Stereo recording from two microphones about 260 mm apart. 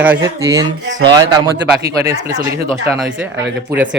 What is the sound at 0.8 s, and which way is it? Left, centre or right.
Speech, right.